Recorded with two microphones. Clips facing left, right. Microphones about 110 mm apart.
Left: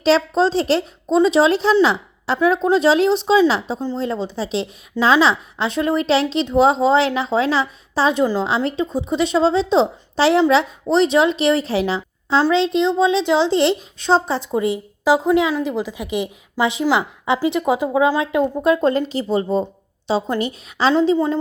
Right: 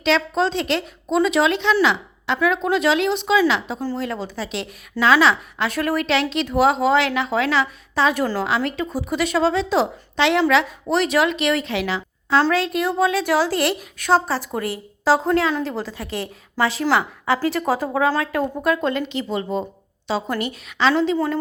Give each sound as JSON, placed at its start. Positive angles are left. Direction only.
{"t": 0.0, "sound": "a woman's voice", "side_deg": 35}
{"t": 8.2, "sound": "a woman's voice", "side_deg": 20}
{"t": 12.4, "sound": "a woman's voice", "side_deg": 20}